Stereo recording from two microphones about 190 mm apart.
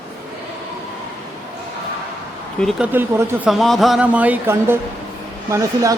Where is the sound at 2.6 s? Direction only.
Centre (ahead or behind).